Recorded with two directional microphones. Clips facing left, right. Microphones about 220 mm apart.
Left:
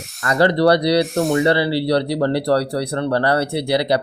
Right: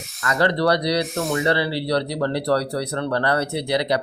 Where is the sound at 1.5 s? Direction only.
35° left (ahead or behind).